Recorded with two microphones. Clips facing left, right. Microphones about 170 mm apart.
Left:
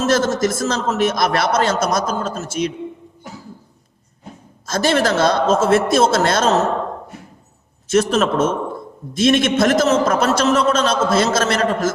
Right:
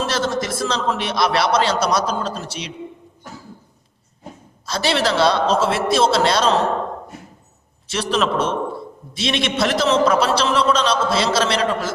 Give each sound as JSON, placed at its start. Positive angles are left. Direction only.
{"t": 0.0, "sound": "a man's voice", "side_deg": 45}
{"t": 4.6, "sound": "a man's voice", "side_deg": 45}
{"t": 7.9, "sound": "a man's voice", "side_deg": 45}